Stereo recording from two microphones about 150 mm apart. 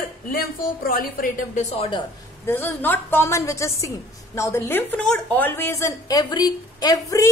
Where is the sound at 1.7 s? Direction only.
40° left (ahead or behind).